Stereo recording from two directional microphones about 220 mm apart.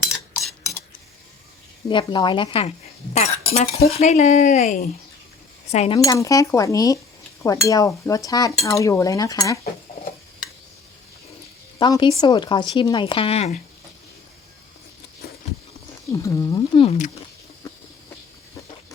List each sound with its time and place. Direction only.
1.9 s speech: 20° left (ahead or behind)
6.0 s dishes: 15° left (ahead or behind)
11.8 s speech: 20° left (ahead or behind)
15.2 s a sound: 45° left (ahead or behind)
16.1 s speech: 15° left (ahead or behind)